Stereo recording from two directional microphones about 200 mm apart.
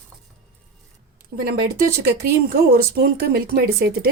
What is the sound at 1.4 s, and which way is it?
A woman's voice, 50° right (ahead or behind).